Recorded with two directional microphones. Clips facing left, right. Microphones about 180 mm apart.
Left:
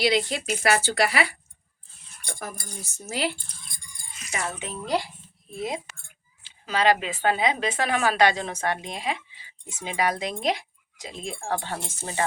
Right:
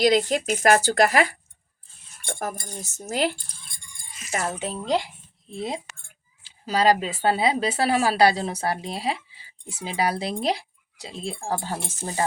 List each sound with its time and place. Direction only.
0.0 s speech: 45° right (ahead or behind)
4.9 s speech: 15° right (ahead or behind)
5.5 s speech: 30° right (ahead or behind)